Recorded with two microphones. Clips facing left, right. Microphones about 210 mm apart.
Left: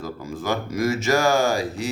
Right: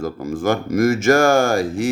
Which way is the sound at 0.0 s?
50° right (ahead or behind).